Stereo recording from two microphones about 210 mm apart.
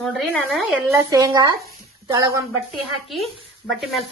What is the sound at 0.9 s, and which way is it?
A woman's voice, 15° right (ahead or behind).